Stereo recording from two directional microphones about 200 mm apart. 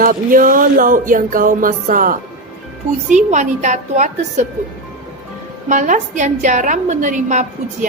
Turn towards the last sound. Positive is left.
turn(degrees=-40)  # may be behind; listen again after turning